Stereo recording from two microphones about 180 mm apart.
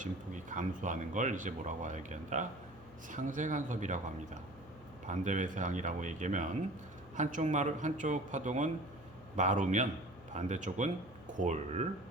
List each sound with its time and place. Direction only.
0.0 s speech: 45° right (ahead or behind)
5.0 s speech: 45° right (ahead or behind)